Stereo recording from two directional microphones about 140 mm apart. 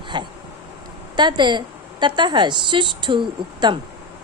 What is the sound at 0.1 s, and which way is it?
Bee, 35° right (ahead or behind).